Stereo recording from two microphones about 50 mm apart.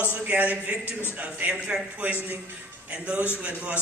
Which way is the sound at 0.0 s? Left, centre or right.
Right.